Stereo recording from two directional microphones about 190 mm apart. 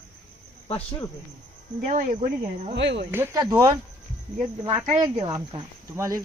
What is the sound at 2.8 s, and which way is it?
Speech, 70° right (ahead or behind).